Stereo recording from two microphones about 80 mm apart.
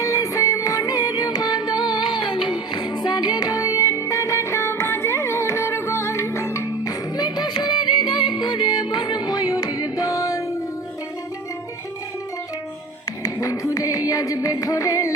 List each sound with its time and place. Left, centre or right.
0.0 s music: left
7.2 s music: left
13.2 s music: left